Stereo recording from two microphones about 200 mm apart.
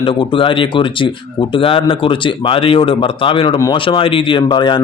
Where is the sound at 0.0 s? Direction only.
25° left (ahead or behind).